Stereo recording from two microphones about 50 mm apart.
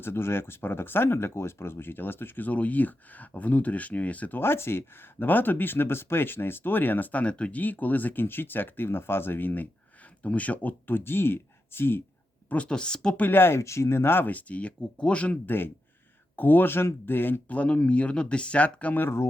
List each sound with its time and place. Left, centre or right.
0.0 s speech: left
4.4 s speech: left
12.5 s speech: left
13.1 s speech: left
13.6 s speech: left
15.4 s speech: left
17.5 s speech: left
18.9 s speech: left